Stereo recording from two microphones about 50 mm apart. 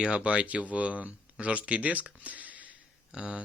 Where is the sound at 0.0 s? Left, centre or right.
Right.